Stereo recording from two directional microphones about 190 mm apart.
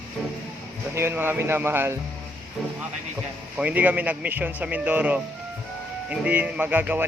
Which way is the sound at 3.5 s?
10° right (ahead or behind).